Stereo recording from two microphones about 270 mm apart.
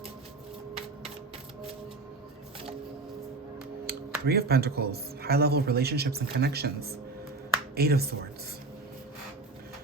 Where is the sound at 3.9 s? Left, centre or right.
Right.